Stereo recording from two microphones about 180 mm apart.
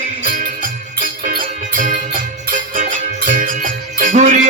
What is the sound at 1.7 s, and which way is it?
Music, 50° right (ahead or behind).